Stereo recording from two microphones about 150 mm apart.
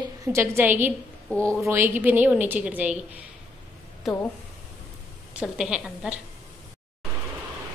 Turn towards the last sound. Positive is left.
turn(degrees=-5)  # may be behind; listen again after turning